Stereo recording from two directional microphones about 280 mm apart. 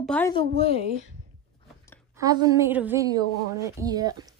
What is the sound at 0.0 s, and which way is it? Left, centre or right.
Speech, centre.